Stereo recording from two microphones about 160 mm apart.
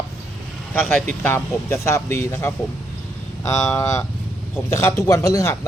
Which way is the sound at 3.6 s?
15° left (ahead or behind).